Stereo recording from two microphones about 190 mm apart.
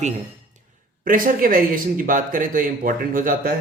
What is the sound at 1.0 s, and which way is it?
Speech, 45° right (ahead or behind).